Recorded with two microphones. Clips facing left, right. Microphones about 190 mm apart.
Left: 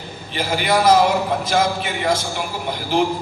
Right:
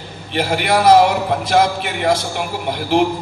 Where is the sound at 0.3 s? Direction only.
65° right (ahead or behind).